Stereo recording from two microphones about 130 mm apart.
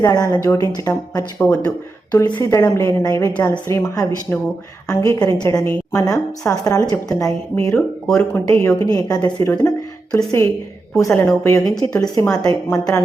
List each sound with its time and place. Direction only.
0.0 s a woman's voice: 25° left (ahead or behind)
2.2 s a woman's voice: 30° left (ahead or behind)